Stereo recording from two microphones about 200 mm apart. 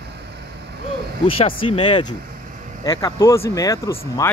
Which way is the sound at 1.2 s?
30° left (ahead or behind).